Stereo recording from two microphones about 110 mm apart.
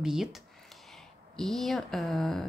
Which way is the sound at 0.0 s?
5° right (ahead or behind).